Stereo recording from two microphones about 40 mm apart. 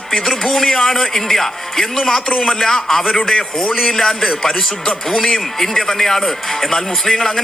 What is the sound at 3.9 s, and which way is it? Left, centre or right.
Speech, centre.